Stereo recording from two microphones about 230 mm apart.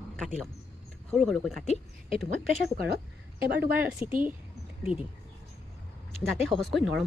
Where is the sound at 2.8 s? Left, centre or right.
Right.